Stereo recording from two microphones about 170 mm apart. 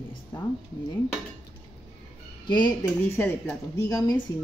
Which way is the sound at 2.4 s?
25° left (ahead or behind).